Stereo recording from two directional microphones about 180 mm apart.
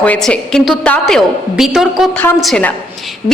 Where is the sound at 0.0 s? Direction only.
5° left (ahead or behind).